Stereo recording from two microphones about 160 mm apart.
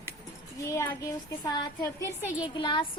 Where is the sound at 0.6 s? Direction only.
20° left (ahead or behind).